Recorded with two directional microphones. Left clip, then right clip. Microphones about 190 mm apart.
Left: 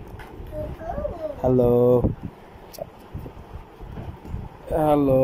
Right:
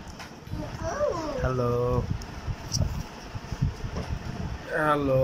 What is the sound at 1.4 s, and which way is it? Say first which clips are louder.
Speech: left 11 dB; 30° left (ahead or behind).